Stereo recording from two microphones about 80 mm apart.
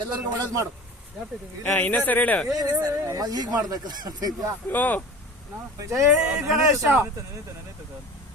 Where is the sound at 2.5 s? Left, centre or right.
Right.